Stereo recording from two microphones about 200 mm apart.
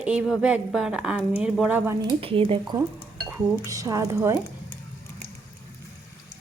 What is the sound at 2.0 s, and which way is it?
Speech, 25° right (ahead or behind).